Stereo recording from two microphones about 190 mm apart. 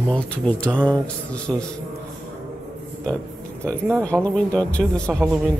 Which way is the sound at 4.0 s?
5° left (ahead or behind).